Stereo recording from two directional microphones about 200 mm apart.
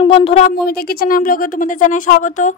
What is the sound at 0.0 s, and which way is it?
Speech, 30° left (ahead or behind).